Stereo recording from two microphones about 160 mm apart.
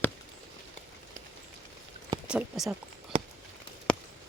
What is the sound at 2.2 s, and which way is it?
Speech, 5° right (ahead or behind).